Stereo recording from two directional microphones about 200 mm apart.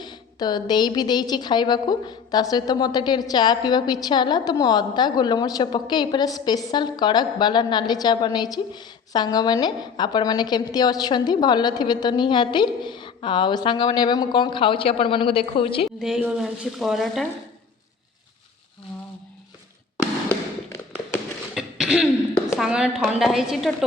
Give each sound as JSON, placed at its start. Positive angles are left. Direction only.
{"t": 0.0, "sound": "speech", "side_deg": 20}
{"t": 16.0, "sound": "speech", "side_deg": 0}
{"t": 20.2, "sound": "tap", "side_deg": 15}
{"t": 21.5, "sound": "cough", "side_deg": -5}
{"t": 22.5, "sound": "speech", "side_deg": 0}